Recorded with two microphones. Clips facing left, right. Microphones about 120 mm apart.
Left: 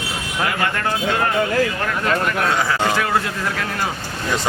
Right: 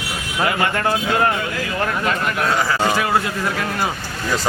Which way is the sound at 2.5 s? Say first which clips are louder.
Right 1 dB; centre (ahead or behind).